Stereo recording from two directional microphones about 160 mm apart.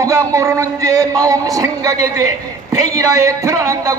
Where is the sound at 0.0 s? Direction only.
20° right (ahead or behind).